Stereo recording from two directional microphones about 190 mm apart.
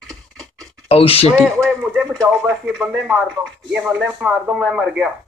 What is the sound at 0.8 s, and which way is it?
Speech, 30° left (ahead or behind).